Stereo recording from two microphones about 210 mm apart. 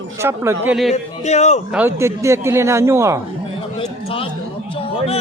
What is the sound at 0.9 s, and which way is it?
Speech, 35° left (ahead or behind).